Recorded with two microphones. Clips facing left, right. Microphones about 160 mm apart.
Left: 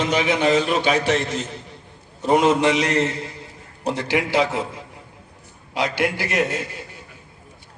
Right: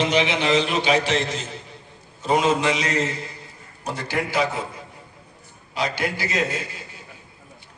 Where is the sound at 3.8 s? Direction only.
90° left; by 6.9 s 65° left (ahead or behind).